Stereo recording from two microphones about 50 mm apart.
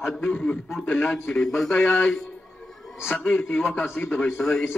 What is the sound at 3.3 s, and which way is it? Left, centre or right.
Speech, left.